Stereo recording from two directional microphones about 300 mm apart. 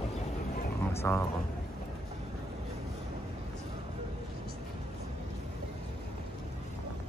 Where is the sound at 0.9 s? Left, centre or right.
Centre.